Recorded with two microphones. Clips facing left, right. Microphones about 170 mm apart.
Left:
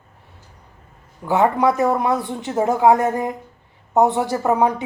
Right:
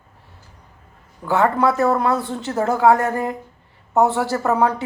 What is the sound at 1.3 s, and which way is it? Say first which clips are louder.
Speech: left 1 dB; 15° left (ahead or behind).